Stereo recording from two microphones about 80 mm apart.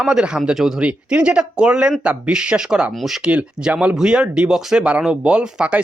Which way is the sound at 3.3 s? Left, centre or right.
Centre.